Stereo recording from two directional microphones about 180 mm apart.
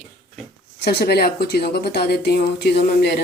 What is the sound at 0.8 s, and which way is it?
Speech, 60° left (ahead or behind).